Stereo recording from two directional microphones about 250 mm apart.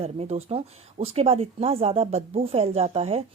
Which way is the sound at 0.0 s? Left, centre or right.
Right.